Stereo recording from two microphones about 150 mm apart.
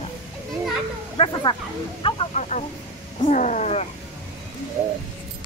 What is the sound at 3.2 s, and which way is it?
Roaring cats, 60° left (ahead or behind).